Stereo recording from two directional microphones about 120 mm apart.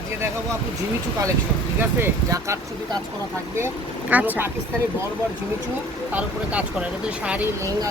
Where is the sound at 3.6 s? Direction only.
15° right (ahead or behind).